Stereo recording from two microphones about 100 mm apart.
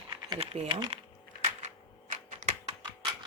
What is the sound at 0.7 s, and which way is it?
Speech, 50° right (ahead or behind).